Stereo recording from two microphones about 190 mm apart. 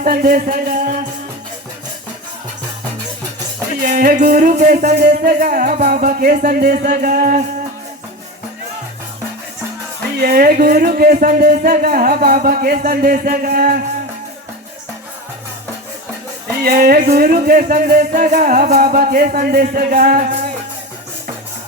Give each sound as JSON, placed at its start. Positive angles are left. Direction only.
{"t": 0.0, "sound": "music", "side_deg": -50}
{"t": 3.8, "sound": "music", "side_deg": -50}
{"t": 10.2, "sound": "music", "side_deg": -55}
{"t": 16.6, "sound": "music", "side_deg": -50}